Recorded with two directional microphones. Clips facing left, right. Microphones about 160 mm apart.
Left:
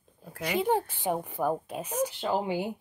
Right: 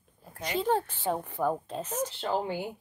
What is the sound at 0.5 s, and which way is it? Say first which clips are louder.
A woman's voice: left 1 dB; 15° left (ahead or behind).